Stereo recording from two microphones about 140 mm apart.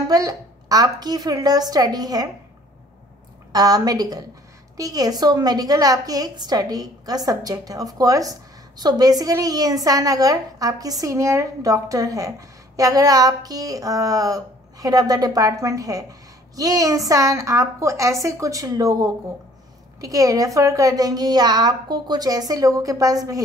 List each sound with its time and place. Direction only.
0.1 s a woman's voice: 25° right (ahead or behind)
3.5 s a woman's voice: 30° right (ahead or behind)